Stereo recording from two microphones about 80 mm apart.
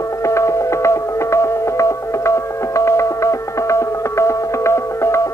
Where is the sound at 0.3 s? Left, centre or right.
Left.